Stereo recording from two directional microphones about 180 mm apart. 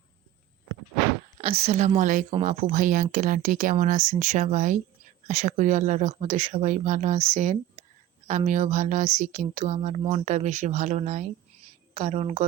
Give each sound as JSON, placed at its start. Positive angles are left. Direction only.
{"t": 1.4, "sound": "a woman's voice", "side_deg": -35}